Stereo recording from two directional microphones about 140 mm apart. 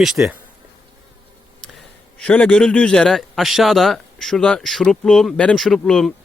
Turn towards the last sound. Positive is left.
turn(degrees=0)  # may be behind; listen again after turning